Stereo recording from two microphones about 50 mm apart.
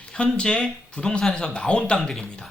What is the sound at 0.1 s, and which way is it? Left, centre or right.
Speech, centre.